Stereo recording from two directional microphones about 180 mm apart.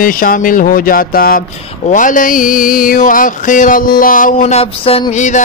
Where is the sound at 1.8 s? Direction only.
45° left (ahead or behind).